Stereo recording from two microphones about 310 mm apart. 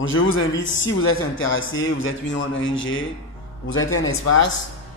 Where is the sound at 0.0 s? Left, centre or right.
Left.